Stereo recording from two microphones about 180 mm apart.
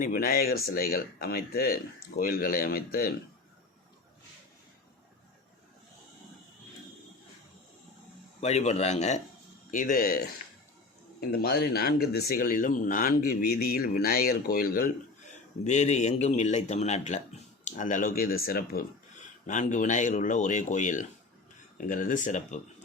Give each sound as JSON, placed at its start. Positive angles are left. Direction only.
{"t": 0.0, "sound": "speech", "side_deg": 55}
{"t": 8.4, "sound": "speech", "side_deg": 40}
{"t": 9.7, "sound": "speech", "side_deg": 50}
{"t": 11.2, "sound": "speech", "side_deg": 65}
{"t": 15.6, "sound": "speech", "side_deg": 40}
{"t": 19.5, "sound": "speech", "side_deg": 45}